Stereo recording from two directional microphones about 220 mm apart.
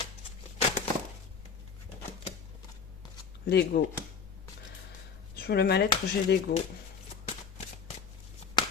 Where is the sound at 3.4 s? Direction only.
45° left (ahead or behind).